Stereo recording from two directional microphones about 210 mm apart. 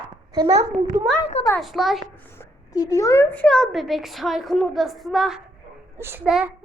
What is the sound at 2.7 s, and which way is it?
A woman's voice, 15° left (ahead or behind).